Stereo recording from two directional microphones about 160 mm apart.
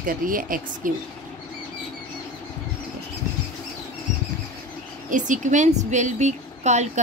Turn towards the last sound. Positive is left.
turn(degrees=-45)  # may be behind; listen again after turning